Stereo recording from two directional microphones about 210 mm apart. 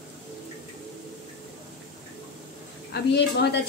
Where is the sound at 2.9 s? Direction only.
55° left (ahead or behind).